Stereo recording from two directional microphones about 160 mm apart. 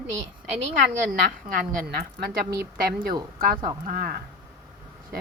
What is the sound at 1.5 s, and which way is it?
A woman's voice, 65° right (ahead or behind).